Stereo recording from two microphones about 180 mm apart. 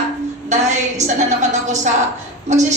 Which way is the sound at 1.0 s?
40° right (ahead or behind).